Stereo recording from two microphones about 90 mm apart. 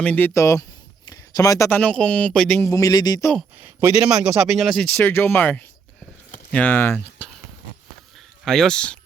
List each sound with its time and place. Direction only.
0.0 s speech: 15° left (ahead or behind)
0.3 s speech: 35° left (ahead or behind)
1.1 s a sound: 40° left (ahead or behind)
1.7 s speech: 15° left (ahead or behind)
2.6 s speech: 40° left (ahead or behind)
3.6 s speech: 25° right (ahead or behind)
3.9 s speech: 10° right (ahead or behind)
4.9 s speech: 25° left (ahead or behind)
8.4 s speech: 5° left (ahead or behind)